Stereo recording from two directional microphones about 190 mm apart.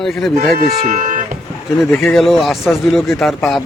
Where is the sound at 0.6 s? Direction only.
40° right (ahead or behind).